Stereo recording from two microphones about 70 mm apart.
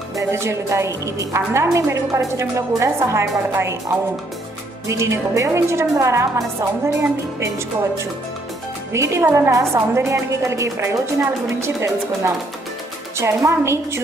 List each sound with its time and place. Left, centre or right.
0.1 s a woman's voice: right
4.8 s a woman's voice: right
9.2 s a woman's voice: right
9.5 s a woman's voice: right